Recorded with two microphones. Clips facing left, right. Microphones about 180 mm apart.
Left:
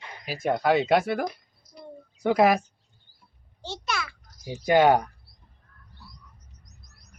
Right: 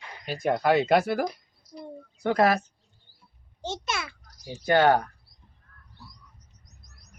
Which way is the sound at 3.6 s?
20° right (ahead or behind).